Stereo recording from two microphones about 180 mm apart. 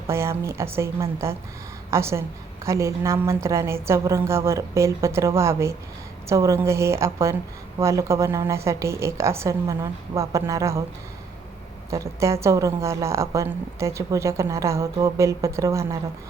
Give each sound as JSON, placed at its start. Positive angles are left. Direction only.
{"t": 0.1, "sound": "a woman's voice", "side_deg": -15}
{"t": 11.9, "sound": "a woman's voice", "side_deg": -15}